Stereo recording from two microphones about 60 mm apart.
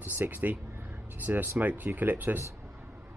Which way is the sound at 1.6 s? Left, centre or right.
Right.